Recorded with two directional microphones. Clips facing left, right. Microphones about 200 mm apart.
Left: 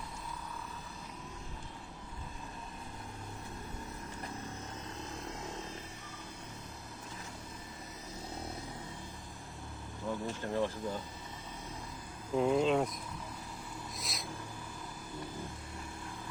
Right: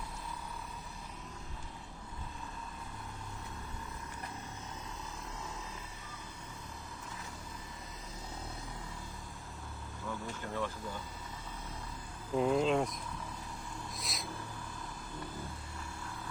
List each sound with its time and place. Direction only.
10.1 s speech: 30° left (ahead or behind)
12.3 s speech: centre (ahead or behind)
14.0 s a sound: centre (ahead or behind)